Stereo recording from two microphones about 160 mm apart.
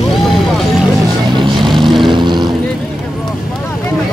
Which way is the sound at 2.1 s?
30° right (ahead or behind).